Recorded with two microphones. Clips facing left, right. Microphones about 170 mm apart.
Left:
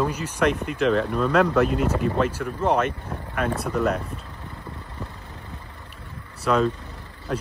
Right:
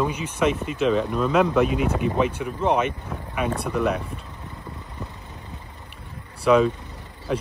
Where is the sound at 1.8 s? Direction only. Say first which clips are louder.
Even; 60° right (ahead or behind).